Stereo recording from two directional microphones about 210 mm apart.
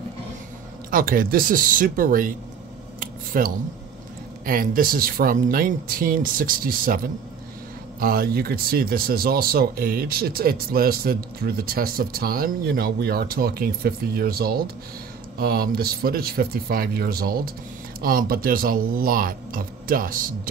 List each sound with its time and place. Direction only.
0.8 s speech: 40° right (ahead or behind)
3.0 s a sound: 45° right (ahead or behind)
4.5 s speech: 40° right (ahead or behind)